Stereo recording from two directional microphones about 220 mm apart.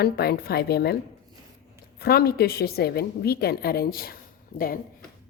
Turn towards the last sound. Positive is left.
turn(degrees=40)  # may be behind; listen again after turning